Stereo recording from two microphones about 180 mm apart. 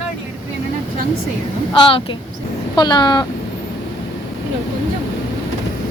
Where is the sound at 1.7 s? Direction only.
25° left (ahead or behind).